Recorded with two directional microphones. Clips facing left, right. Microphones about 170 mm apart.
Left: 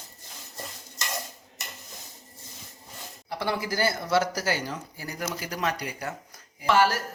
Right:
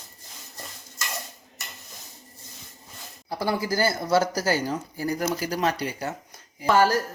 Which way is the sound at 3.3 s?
40° right (ahead or behind).